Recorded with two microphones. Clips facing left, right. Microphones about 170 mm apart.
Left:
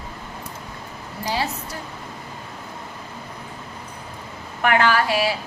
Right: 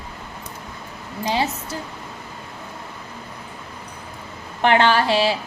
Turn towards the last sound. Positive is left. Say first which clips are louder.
# right 2 dB
turn(degrees=-25)  # may be behind; listen again after turning